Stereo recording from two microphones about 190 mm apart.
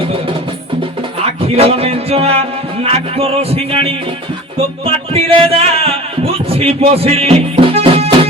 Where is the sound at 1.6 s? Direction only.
30° right (ahead or behind).